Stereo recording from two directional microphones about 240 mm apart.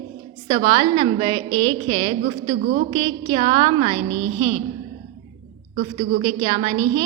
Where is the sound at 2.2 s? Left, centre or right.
Right.